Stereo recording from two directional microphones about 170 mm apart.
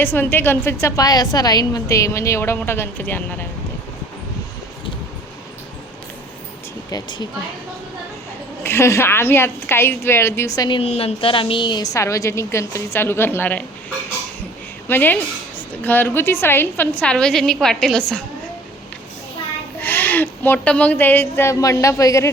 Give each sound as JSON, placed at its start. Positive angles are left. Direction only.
{"t": 0.0, "sound": "a woman's voice", "side_deg": 10}
{"t": 6.9, "sound": "speech", "side_deg": 25}
{"t": 8.6, "sound": "a woman's voice", "side_deg": 15}
{"t": 14.8, "sound": "a woman's voice", "side_deg": 10}
{"t": 19.8, "sound": "a woman's voice", "side_deg": 10}